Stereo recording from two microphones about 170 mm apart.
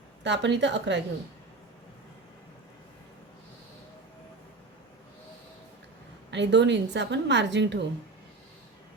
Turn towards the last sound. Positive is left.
turn(degrees=-90)